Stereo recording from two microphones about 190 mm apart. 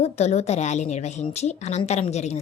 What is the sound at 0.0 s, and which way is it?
A woman's voice, 35° left (ahead or behind).